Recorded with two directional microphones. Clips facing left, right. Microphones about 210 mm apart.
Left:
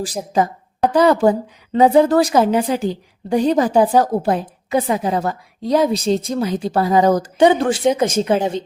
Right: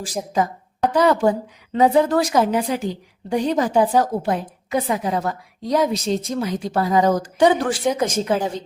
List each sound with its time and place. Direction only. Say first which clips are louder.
0.9 s a woman's voice: left 3 dB; 35° left (ahead or behind)
7.3 s a woman's voice: left 3 dB; 25° left (ahead or behind)